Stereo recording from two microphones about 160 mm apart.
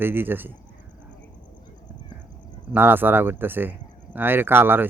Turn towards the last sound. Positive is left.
turn(degrees=-15)  # may be behind; listen again after turning